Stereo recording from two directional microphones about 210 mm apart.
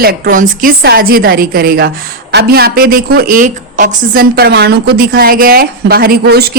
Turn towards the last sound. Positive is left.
turn(degrees=-45)  # may be behind; listen again after turning